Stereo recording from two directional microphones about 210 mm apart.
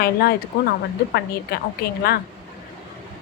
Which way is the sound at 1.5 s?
45° left (ahead or behind).